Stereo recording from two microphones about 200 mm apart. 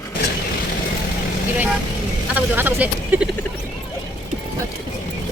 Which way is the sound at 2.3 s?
10° right (ahead or behind).